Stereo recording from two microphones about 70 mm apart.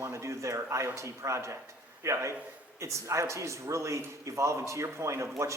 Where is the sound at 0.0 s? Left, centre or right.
Right.